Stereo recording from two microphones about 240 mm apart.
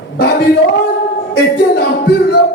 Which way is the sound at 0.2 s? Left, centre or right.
Left.